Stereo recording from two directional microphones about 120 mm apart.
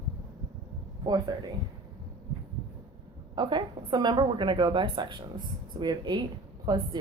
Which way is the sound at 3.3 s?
35° right (ahead or behind).